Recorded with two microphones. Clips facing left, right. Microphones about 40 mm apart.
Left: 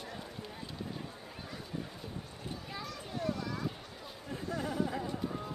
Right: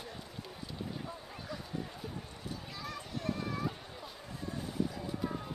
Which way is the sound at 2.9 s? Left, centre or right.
Right.